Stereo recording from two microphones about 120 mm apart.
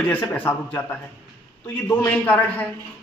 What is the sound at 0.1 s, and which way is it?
Speech, 15° left (ahead or behind).